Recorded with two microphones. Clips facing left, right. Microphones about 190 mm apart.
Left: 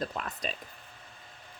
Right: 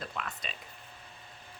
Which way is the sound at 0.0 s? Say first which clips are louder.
Left 5 dB; 40° left (ahead or behind).